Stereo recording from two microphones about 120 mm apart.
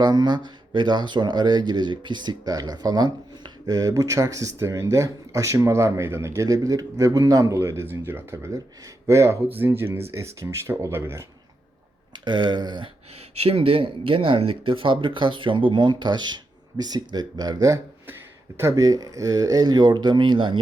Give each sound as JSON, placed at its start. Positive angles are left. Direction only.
{"t": 0.0, "sound": "speech", "side_deg": -35}
{"t": 12.2, "sound": "speech", "side_deg": -40}
{"t": 13.3, "sound": "speech", "side_deg": -55}
{"t": 18.0, "sound": "speech", "side_deg": -20}